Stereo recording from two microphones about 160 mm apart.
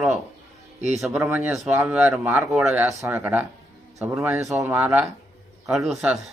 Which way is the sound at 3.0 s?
15° right (ahead or behind).